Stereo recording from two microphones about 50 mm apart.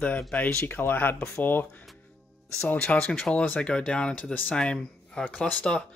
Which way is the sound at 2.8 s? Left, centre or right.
Left.